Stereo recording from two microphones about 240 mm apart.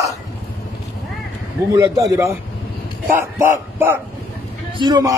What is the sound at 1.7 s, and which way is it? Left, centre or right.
Speech, centre.